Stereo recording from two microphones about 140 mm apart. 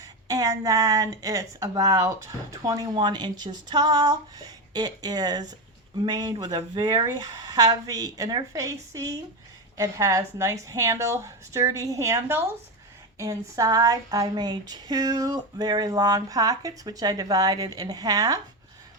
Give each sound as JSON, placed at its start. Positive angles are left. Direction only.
{"t": 0.0, "sound": "a woman's voice", "side_deg": -25}